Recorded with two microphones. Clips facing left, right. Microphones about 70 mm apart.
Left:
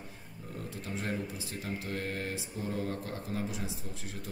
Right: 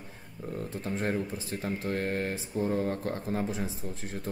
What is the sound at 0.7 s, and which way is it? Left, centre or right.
A man's voice, right.